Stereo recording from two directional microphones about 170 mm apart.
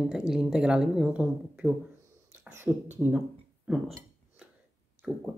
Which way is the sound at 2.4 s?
10° right (ahead or behind).